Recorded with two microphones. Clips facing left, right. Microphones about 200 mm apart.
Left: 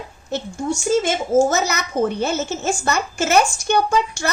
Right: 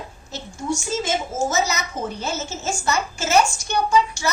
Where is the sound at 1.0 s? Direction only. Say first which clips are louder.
Left 7 dB; 60° left (ahead or behind).